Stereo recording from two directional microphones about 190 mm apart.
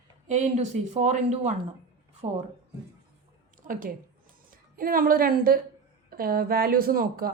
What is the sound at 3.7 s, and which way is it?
A woman's voice, 45° right (ahead or behind).